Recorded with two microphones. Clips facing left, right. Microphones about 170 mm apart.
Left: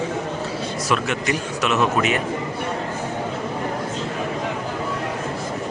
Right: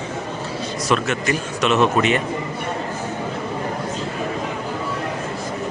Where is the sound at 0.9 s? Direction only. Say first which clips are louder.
Right 2 dB; 10° left (ahead or behind).